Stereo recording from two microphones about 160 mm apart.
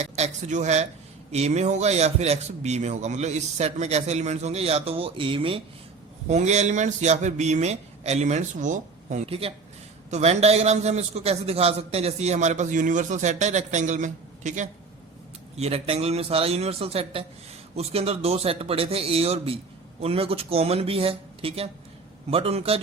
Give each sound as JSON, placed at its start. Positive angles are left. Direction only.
{"t": 0.0, "sound": "a man's voice", "side_deg": -45}
{"t": 6.2, "sound": "a man's voice", "side_deg": -45}
{"t": 9.2, "sound": "a man's voice", "side_deg": -35}